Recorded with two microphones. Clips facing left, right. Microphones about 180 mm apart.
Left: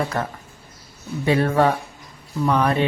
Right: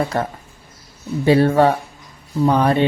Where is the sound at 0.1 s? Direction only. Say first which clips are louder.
Right 4 dB; 30° right (ahead or behind).